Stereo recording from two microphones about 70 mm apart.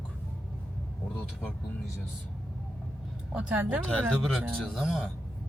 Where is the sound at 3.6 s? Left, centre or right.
Right.